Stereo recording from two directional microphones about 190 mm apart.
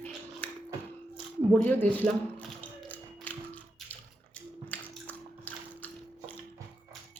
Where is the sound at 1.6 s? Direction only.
10° left (ahead or behind).